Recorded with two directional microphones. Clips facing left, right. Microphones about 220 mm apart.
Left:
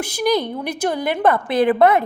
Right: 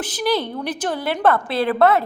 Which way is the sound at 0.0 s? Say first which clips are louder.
Left 2 dB; 10° left (ahead or behind).